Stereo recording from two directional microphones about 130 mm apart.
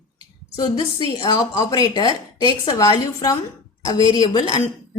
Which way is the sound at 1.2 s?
30° left (ahead or behind).